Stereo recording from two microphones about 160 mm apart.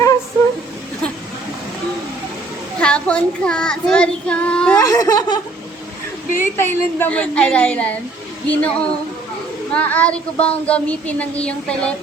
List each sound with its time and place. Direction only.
2.8 s child singing: 5° left (ahead or behind)
4.8 s speech: 25° left (ahead or behind)
6.4 s child singing: 15° left (ahead or behind)